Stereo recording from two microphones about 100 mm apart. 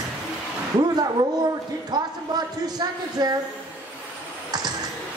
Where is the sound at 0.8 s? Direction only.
45° right (ahead or behind).